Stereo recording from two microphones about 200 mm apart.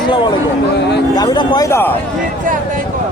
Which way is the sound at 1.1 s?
20° left (ahead or behind).